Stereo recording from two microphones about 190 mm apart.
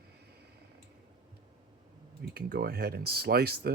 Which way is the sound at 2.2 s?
55° right (ahead or behind).